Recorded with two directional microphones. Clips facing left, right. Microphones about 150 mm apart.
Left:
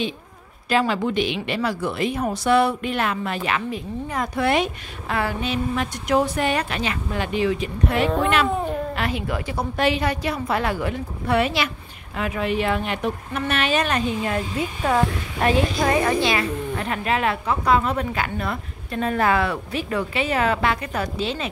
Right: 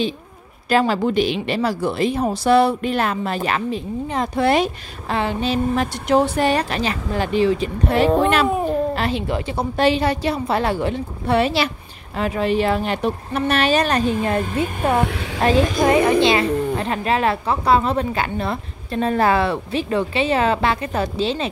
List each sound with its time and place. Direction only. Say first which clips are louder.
0.7 s a woman's voice: right 3 dB; 40° right (ahead or behind)
15.0 s a sound: right 3 dB; 70° right (ahead or behind)
15.4 s a woman's voice: right 4 dB; 20° right (ahead or behind)